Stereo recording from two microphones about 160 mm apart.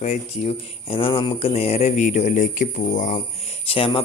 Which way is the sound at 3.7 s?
35° left (ahead or behind).